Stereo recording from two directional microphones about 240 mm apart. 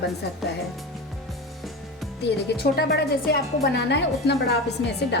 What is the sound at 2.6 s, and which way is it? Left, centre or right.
A woman's voice, left.